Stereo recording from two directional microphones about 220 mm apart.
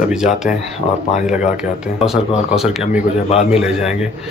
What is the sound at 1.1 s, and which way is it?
Speech, 5° right (ahead or behind).